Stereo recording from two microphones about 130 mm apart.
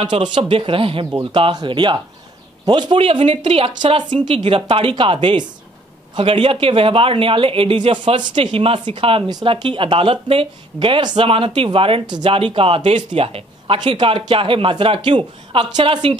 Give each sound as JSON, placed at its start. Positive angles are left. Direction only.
{"t": 0.0, "sound": "speech", "side_deg": -35}
{"t": 3.7, "sound": "speech", "side_deg": -35}